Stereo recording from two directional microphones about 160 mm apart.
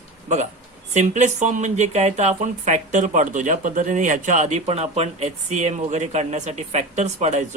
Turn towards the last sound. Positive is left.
turn(degrees=-45)  # may be behind; listen again after turning